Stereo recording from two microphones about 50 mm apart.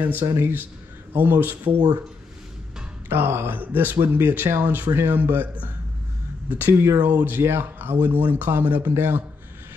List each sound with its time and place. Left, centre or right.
0.0 s speech: right
3.1 s speech: right
3.9 s speech: right
6.7 s speech: right
7.0 s speech: right
7.4 s speech: right
8.9 s speech: right